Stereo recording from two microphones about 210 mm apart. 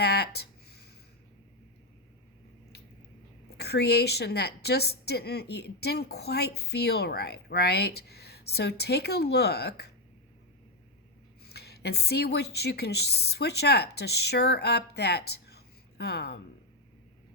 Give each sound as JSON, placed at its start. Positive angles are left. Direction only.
{"t": 0.0, "sound": "a sound", "side_deg": 50}
{"t": 3.6, "sound": "a woman's voice", "side_deg": 50}
{"t": 11.4, "sound": "a woman's voice", "side_deg": 50}